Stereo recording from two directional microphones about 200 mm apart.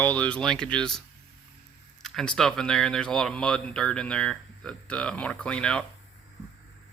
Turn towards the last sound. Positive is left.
turn(degrees=5)  # may be behind; listen again after turning